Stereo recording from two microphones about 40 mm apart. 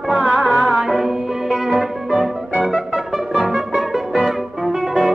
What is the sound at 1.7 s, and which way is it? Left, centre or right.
Music, centre.